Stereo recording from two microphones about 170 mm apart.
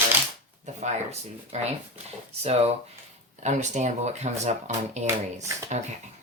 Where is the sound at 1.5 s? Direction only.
40° right (ahead or behind).